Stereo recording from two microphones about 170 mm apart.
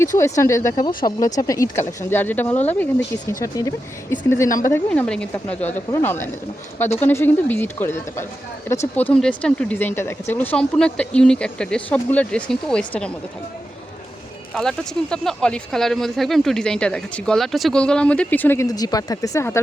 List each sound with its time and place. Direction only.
0.2 s speech: 20° left (ahead or behind)
4.7 s speech: 5° left (ahead or behind)
14.5 s speech: 5° left (ahead or behind)